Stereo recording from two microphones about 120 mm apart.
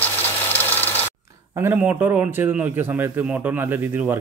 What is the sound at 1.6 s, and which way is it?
A man's voice, 15° right (ahead or behind).